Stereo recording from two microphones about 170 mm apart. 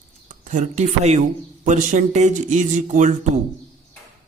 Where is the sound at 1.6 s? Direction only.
45° right (ahead or behind).